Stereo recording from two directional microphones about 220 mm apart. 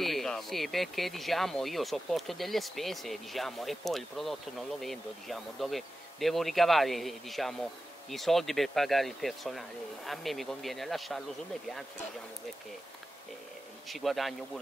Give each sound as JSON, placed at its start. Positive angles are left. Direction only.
{"t": 0.0, "sound": "speech", "side_deg": 0}
{"t": 13.8, "sound": "speech", "side_deg": 0}